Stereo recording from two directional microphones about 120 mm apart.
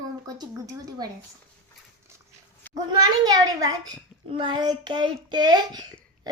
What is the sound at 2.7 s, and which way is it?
A child's voice, 35° right (ahead or behind).